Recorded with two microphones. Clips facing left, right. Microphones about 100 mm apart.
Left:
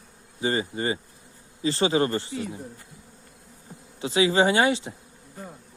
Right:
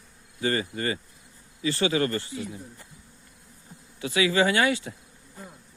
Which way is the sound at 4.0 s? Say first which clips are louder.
Left 2 dB; 25° left (ahead or behind).